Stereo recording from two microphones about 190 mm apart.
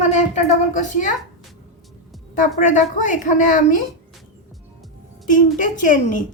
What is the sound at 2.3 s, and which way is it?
A woman's voice, 45° left (ahead or behind).